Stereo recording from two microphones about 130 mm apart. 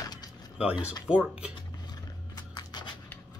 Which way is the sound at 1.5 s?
35° left (ahead or behind).